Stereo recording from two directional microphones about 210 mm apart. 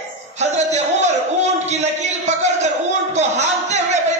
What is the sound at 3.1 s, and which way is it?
Speech, 35° right (ahead or behind).